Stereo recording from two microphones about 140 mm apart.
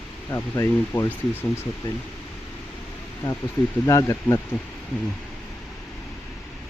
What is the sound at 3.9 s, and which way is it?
Speech, 20° left (ahead or behind).